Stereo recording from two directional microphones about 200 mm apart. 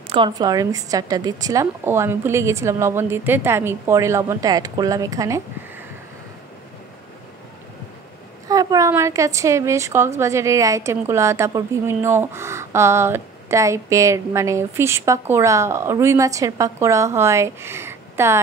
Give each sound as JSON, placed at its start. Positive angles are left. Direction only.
{"t": 0.1, "sound": "a woman's voice", "side_deg": -20}
{"t": 8.5, "sound": "a woman's voice", "side_deg": -15}